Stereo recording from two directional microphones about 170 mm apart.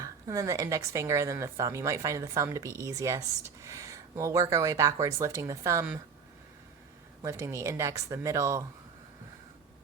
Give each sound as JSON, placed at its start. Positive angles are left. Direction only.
{"t": 0.0, "sound": "a woman's voice", "side_deg": -20}
{"t": 7.2, "sound": "speech", "side_deg": -15}